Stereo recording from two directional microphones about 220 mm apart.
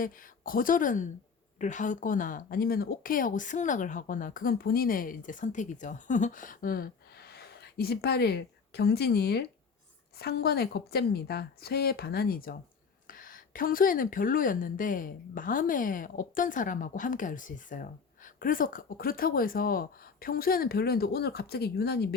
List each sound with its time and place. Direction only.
0.0 s a woman's voice: 40° left (ahead or behind)